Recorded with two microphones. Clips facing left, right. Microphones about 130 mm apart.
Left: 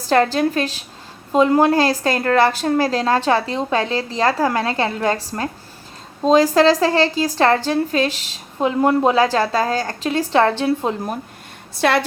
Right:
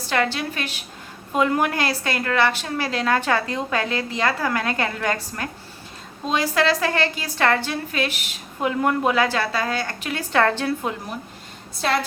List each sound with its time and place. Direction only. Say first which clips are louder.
0.1 s a woman's voice: left 8 dB; 40° left (ahead or behind)
11.8 s a woman's voice: left 5 dB; 70° left (ahead or behind)